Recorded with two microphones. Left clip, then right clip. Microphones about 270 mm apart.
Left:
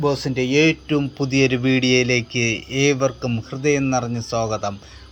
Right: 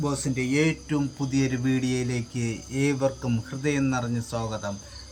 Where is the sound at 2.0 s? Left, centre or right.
Left.